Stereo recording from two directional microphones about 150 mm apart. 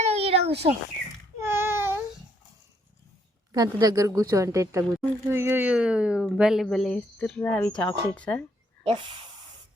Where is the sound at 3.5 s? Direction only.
25° right (ahead or behind); by 8.4 s 10° left (ahead or behind).